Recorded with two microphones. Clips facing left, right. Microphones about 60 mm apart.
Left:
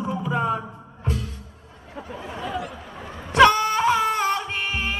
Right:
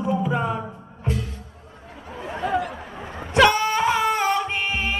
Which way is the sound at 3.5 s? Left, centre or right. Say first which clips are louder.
Even; right.